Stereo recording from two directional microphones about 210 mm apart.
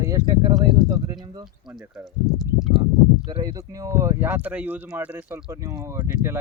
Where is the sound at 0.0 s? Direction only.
15° right (ahead or behind).